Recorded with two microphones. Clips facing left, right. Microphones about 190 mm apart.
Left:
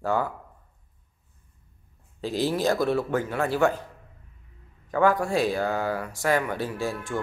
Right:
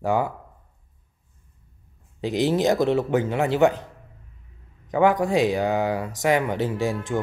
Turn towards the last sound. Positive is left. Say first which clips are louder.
# right 5 dB
turn(degrees=-15)  # may be behind; listen again after turning